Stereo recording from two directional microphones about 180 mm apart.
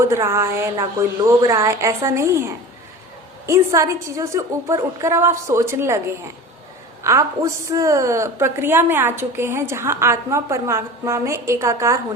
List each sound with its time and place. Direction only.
0.0 s a woman's voice: 15° right (ahead or behind)
7.0 s a woman's voice: 15° right (ahead or behind)